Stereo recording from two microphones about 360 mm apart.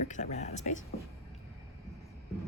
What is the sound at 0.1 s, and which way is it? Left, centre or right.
Speech, centre.